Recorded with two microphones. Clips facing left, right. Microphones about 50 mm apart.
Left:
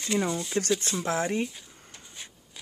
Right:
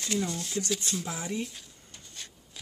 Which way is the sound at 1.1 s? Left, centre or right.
Left.